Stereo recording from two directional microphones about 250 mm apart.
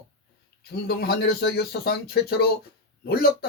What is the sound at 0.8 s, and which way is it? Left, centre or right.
Speech, left.